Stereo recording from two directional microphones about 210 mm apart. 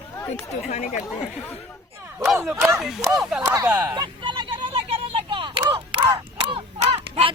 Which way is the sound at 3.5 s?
15° right (ahead or behind).